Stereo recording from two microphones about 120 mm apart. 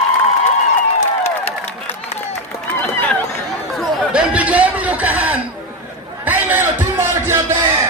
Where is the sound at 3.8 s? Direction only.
5° right (ahead or behind).